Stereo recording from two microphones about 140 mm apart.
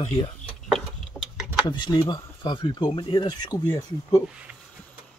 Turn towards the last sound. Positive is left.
turn(degrees=-5)  # may be behind; listen again after turning